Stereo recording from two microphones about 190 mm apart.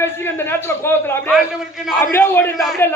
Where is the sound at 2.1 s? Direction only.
10° left (ahead or behind).